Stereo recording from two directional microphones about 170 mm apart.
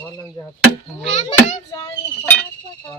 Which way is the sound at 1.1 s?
45° left (ahead or behind).